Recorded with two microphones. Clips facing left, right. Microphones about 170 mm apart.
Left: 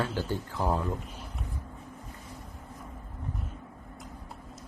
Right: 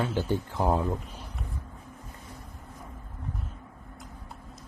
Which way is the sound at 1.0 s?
Centre (ahead or behind).